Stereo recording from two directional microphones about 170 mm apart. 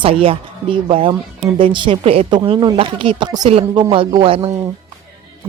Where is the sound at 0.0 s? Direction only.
35° right (ahead or behind).